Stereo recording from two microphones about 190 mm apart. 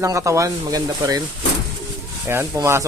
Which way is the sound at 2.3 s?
15° right (ahead or behind).